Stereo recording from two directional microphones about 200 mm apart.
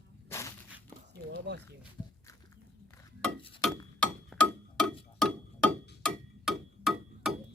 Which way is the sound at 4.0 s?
5° left (ahead or behind).